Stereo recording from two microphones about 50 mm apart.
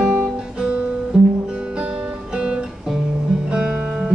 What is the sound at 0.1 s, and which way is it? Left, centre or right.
Guitar, right.